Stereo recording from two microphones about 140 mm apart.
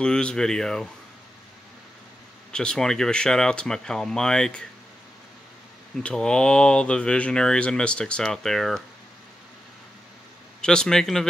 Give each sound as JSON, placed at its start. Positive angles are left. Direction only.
{"t": 0.0, "sound": "speech", "side_deg": 5}
{"t": 2.5, "sound": "speech", "side_deg": 5}
{"t": 6.0, "sound": "speech", "side_deg": 5}
{"t": 10.6, "sound": "speech", "side_deg": 5}